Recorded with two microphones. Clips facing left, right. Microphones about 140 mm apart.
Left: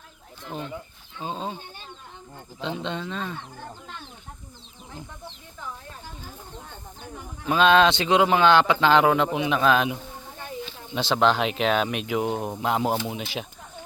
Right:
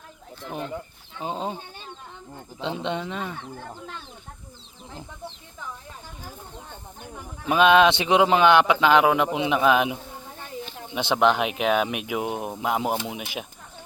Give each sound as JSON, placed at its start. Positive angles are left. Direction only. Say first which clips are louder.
{"t": 1.2, "sound": "speech", "louder": "right 2 dB", "side_deg": -20}
{"t": 2.6, "sound": "speech", "louder": "right 2 dB", "side_deg": -20}
{"t": 7.4, "sound": "speech", "louder": "right 1 dB", "side_deg": -15}